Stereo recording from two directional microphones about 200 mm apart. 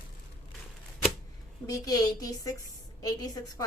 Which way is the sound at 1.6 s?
20° left (ahead or behind).